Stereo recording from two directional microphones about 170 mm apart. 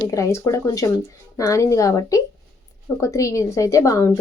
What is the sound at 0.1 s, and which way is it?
A woman's voice, 20° left (ahead or behind).